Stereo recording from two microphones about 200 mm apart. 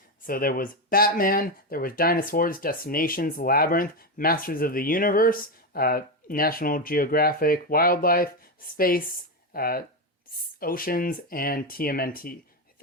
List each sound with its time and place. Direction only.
0.3 s speech: 45° left (ahead or behind)